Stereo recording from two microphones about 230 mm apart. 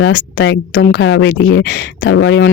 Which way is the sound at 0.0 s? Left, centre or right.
Left.